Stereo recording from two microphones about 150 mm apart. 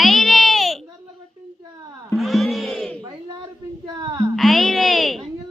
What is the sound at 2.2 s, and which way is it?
Music, centre (ahead or behind).